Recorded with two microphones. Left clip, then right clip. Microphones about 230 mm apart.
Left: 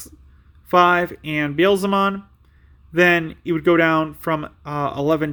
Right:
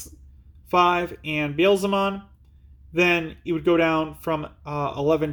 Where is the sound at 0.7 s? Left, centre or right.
Left.